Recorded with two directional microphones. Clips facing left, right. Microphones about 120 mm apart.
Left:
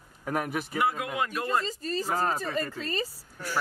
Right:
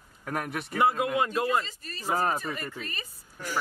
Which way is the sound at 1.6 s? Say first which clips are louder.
Left 13 dB; 35° left (ahead or behind).